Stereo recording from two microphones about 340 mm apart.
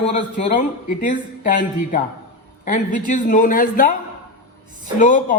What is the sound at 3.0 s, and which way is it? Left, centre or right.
Speech, left.